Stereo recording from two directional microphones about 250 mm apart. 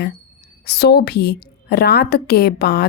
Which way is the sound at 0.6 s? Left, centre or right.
Left.